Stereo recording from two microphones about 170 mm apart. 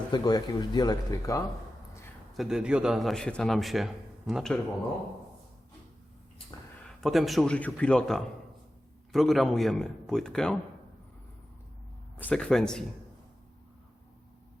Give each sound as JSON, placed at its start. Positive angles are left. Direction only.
{"t": 0.1, "sound": "speech", "side_deg": 25}
{"t": 2.3, "sound": "a man's voice", "side_deg": 0}
{"t": 7.0, "sound": "a man's voice", "side_deg": 0}
{"t": 12.1, "sound": "a man's voice", "side_deg": 10}